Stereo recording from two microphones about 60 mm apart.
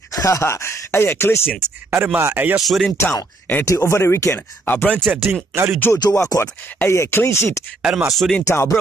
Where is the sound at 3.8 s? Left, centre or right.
Left.